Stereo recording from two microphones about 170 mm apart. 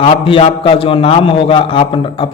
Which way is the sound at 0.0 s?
30° left (ahead or behind).